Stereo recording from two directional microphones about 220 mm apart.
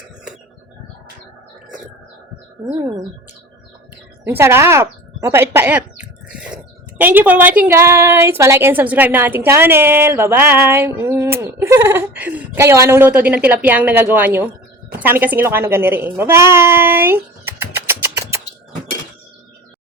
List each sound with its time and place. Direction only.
2.6 s a woman's voice: 15° right (ahead or behind)
4.3 s a sound: 10° right (ahead or behind)
7.0 s a woman's voice: 10° right (ahead or behind)
17.7 s music: 10° right (ahead or behind)